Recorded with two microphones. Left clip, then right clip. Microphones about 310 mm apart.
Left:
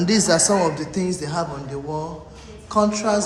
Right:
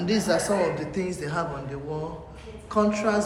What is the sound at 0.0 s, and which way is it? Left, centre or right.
A woman's voice, left.